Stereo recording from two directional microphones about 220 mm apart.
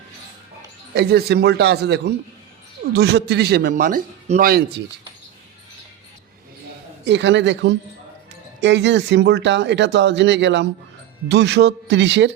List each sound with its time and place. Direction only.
0.9 s speech: 45° right (ahead or behind)
7.0 s speech: 55° right (ahead or behind)